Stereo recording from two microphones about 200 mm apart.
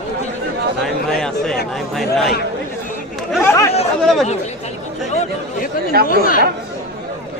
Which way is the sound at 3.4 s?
15° left (ahead or behind).